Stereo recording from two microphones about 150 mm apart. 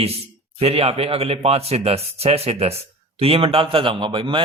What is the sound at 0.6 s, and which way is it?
A man's voice, 40° right (ahead or behind).